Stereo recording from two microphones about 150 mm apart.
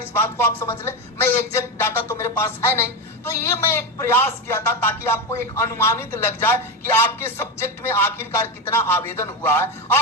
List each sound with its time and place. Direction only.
0.1 s speech: 15° left (ahead or behind)